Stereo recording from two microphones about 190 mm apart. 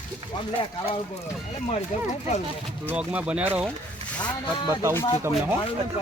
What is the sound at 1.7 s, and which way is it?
Speech, 40° left (ahead or behind).